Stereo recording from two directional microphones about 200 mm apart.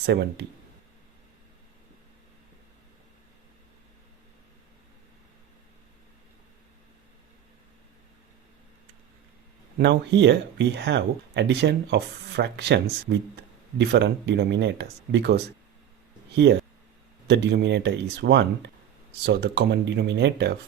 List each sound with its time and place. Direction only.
0.0 s speech: 55° right (ahead or behind)
9.7 s speech: 60° right (ahead or behind)